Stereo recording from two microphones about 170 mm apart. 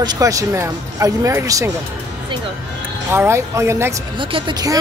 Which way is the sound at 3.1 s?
15° right (ahead or behind).